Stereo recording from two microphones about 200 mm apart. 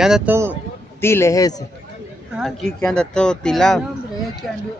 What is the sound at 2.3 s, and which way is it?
Speech, centre (ahead or behind).